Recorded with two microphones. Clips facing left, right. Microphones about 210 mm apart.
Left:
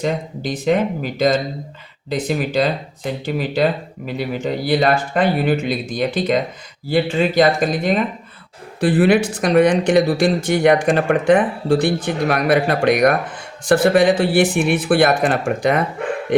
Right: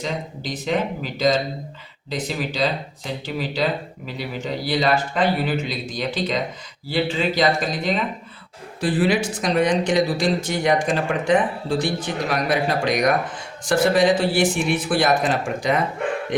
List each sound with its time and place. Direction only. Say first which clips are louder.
0.0 s speech: left 6 dB; 55° left (ahead or behind)
8.8 s speech: left 6 dB; 60° left (ahead or behind)